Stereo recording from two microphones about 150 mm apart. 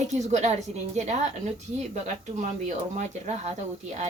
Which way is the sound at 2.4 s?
55° right (ahead or behind).